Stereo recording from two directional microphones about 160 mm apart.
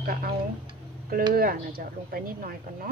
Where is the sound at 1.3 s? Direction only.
65° right (ahead or behind).